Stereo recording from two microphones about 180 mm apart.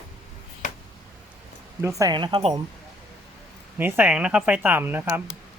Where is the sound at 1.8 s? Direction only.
15° right (ahead or behind).